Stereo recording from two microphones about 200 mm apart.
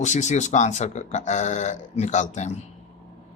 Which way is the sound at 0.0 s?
35° left (ahead or behind).